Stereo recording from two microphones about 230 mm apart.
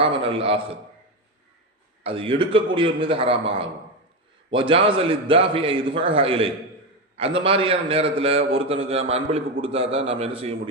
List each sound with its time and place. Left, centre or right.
0.0 s a man's voice: right
2.0 s a man's voice: right